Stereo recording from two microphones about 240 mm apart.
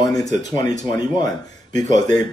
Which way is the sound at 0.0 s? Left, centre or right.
Centre.